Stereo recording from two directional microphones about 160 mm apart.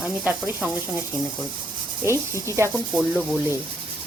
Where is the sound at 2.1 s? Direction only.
15° right (ahead or behind).